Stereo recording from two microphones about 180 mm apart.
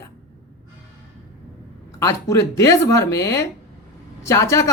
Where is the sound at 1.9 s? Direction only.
15° left (ahead or behind).